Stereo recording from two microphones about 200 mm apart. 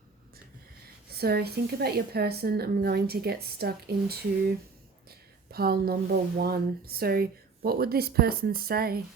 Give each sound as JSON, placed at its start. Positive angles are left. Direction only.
{"t": 1.1, "sound": "a woman's voice", "side_deg": -50}